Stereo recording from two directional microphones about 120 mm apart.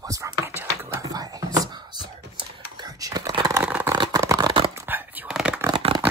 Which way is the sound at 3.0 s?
30° right (ahead or behind).